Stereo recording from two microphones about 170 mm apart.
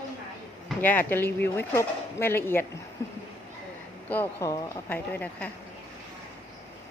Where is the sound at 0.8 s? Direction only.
10° left (ahead or behind).